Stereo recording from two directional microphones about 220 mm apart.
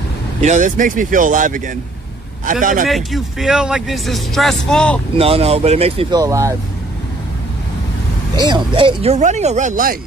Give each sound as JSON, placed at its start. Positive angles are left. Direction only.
{"t": 0.4, "sound": "speech", "side_deg": -35}
{"t": 2.6, "sound": "speech", "side_deg": -40}
{"t": 2.9, "sound": "speech", "side_deg": 0}
{"t": 5.1, "sound": "speech", "side_deg": -25}
{"t": 6.2, "sound": "speech", "side_deg": -15}
{"t": 8.5, "sound": "speech", "side_deg": -20}